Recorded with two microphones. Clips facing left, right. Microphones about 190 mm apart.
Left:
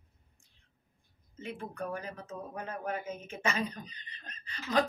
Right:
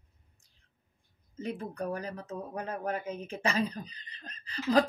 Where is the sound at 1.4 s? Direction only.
35° right (ahead or behind).